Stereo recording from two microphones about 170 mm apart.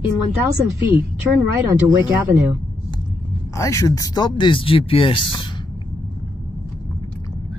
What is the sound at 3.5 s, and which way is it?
Speech, 20° left (ahead or behind).